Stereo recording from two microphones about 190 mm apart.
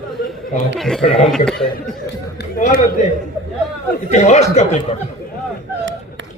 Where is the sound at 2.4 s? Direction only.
50° left (ahead or behind).